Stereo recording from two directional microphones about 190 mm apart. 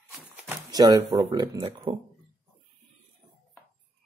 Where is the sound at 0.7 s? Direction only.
20° right (ahead or behind).